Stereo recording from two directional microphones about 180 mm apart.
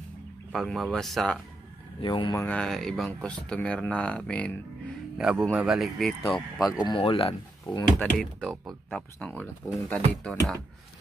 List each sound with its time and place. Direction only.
0.5 s speech: centre (ahead or behind)
2.0 s speech: 25° left (ahead or behind)
2.4 s speech: 5° left (ahead or behind)
6.9 s speech: 30° left (ahead or behind)
8.0 s speech: 5° left (ahead or behind)